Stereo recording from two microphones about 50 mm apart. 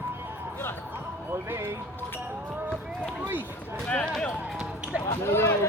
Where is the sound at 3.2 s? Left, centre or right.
Right.